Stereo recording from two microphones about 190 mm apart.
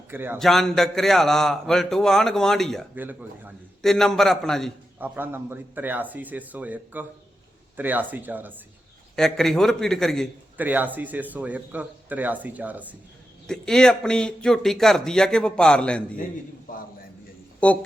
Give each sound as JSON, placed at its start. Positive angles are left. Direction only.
{"t": 0.1, "sound": "a man's voice", "side_deg": -10}
{"t": 0.3, "sound": "speech", "side_deg": 0}
{"t": 2.9, "sound": "speech", "side_deg": -10}
{"t": 3.8, "sound": "speech", "side_deg": 0}
{"t": 4.9, "sound": "speech", "side_deg": -10}
{"t": 9.1, "sound": "speech", "side_deg": 5}
{"t": 10.6, "sound": "speech", "side_deg": -10}
{"t": 13.5, "sound": "speech", "side_deg": 5}
{"t": 16.7, "sound": "a sound", "side_deg": 45}
{"t": 17.6, "sound": "speech", "side_deg": 5}